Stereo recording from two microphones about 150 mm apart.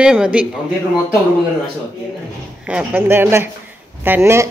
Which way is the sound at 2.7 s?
10° right (ahead or behind).